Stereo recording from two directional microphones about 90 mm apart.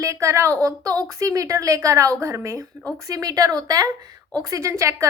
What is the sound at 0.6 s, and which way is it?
A woman's voice, 45° right (ahead or behind).